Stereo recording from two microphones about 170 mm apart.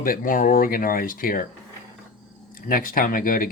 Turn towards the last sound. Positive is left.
turn(degrees=55)  # may be behind; listen again after turning